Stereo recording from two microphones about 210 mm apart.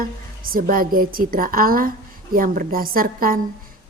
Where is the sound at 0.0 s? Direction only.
45° right (ahead or behind).